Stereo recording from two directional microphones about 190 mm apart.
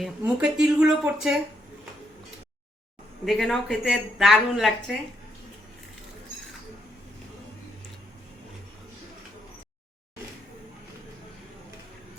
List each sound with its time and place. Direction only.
0.0 s speech: 5° right (ahead or behind)
3.2 s speech: centre (ahead or behind)